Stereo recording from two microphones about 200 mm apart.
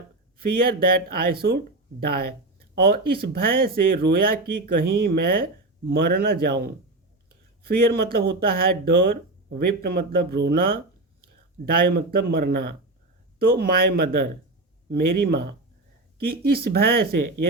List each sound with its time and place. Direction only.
0.3 s speech: 50° right (ahead or behind)
7.6 s speech: 50° right (ahead or behind)